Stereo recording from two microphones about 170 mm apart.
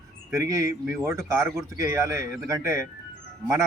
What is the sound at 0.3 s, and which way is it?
Speech, 20° right (ahead or behind).